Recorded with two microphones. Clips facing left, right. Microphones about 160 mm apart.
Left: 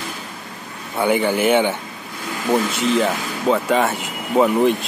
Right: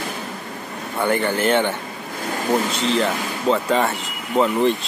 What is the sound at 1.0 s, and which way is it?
Speech, 10° left (ahead or behind).